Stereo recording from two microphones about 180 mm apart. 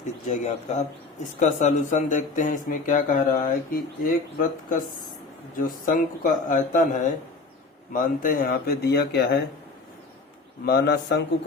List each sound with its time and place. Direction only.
0.3 s speech: 40° left (ahead or behind); by 9.4 s 65° left (ahead or behind)
10.7 s a man's voice: 65° left (ahead or behind)